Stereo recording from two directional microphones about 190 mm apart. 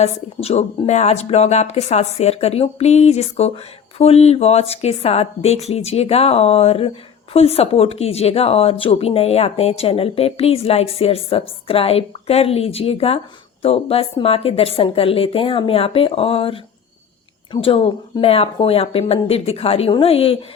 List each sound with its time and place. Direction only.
0.0 s a woman's voice: 35° left (ahead or behind)